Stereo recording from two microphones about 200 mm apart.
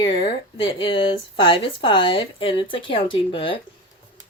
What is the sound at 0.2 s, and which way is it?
Speech, 25° left (ahead or behind).